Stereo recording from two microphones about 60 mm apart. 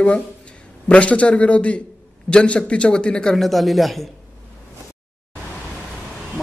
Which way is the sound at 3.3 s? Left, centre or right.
Centre.